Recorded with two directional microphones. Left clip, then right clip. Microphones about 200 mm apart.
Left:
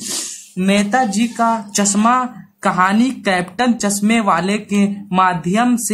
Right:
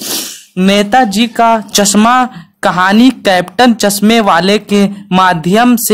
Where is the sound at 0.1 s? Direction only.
35° right (ahead or behind).